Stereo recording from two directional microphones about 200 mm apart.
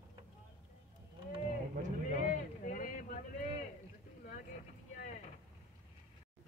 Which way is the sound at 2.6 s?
40° left (ahead or behind).